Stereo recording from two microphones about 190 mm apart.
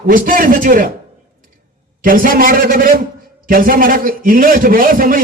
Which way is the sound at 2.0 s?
45° right (ahead or behind).